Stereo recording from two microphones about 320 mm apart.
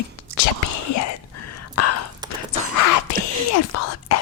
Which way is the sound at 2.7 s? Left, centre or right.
Left.